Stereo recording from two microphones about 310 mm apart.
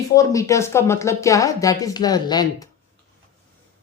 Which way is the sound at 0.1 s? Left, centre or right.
Centre.